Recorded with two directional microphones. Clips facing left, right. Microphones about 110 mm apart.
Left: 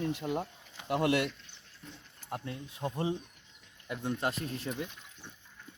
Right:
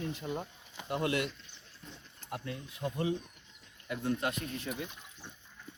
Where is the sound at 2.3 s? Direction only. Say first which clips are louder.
Left 1 dB; 30° left (ahead or behind).